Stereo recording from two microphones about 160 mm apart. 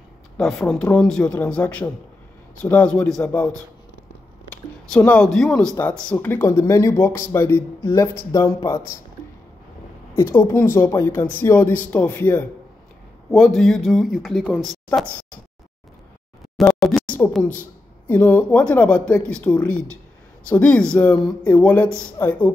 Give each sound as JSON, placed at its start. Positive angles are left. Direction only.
{"t": 0.4, "sound": "speech", "side_deg": 0}
{"t": 10.1, "sound": "speech", "side_deg": 15}
{"t": 13.3, "sound": "speech", "side_deg": 0}
{"t": 16.5, "sound": "a sound", "side_deg": 0}
{"t": 17.3, "sound": "speech", "side_deg": 5}